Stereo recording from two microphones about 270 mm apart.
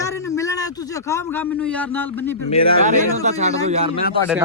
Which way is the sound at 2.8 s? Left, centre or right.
Right.